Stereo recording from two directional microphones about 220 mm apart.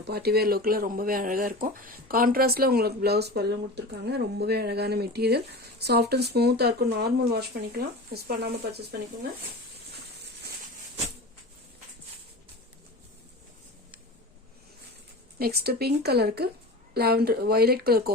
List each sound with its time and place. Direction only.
0.0 s speech: 45° right (ahead or behind)
15.4 s speech: 45° right (ahead or behind)